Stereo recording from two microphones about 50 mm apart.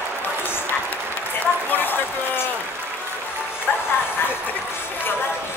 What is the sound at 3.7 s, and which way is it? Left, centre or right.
Music, left.